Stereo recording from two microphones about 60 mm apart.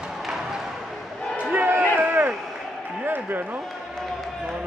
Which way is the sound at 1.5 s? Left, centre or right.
Right.